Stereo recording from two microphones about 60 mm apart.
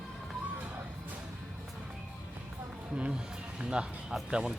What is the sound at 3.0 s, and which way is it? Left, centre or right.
Music, centre.